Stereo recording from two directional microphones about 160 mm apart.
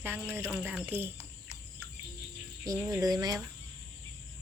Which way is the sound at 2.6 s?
20° right (ahead or behind).